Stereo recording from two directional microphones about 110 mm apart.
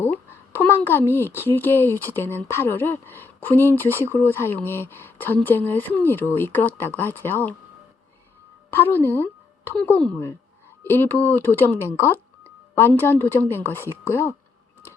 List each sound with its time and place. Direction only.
0.0 s a sound: 20° left (ahead or behind)
1.1 s speech: 20° left (ahead or behind)
8.7 s speech: 20° left (ahead or behind)